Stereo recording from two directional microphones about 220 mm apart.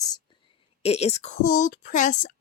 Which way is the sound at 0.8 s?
30° left (ahead or behind).